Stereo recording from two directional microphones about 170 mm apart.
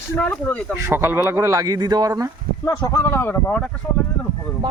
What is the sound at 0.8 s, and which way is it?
Speech, 15° right (ahead or behind).